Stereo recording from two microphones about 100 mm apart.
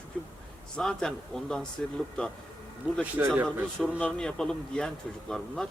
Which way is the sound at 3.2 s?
25° right (ahead or behind).